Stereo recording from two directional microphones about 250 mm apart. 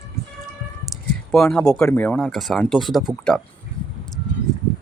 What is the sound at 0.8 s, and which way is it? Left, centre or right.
Speech, centre.